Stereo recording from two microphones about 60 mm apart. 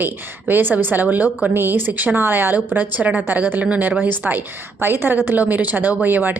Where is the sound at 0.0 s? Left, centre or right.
Right.